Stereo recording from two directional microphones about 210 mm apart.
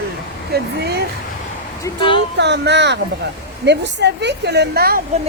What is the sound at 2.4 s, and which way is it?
A woman's voice, 55° right (ahead or behind).